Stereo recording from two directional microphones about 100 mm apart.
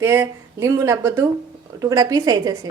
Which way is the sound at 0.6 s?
30° right (ahead or behind).